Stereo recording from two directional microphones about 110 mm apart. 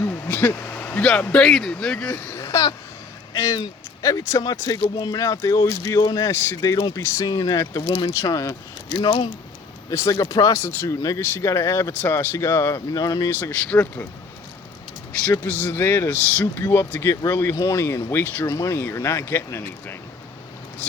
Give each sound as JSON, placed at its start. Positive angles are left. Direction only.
{"t": 0.0, "sound": "speech", "side_deg": 20}
{"t": 2.3, "sound": "a sound", "side_deg": 25}
{"t": 3.3, "sound": "speech", "side_deg": 30}
{"t": 9.9, "sound": "speech", "side_deg": 30}
{"t": 15.4, "sound": "speech", "side_deg": 15}